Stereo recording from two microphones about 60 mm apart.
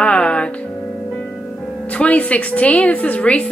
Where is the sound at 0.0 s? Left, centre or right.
Centre.